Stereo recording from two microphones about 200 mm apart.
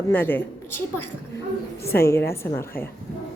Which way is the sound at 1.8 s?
50° left (ahead or behind).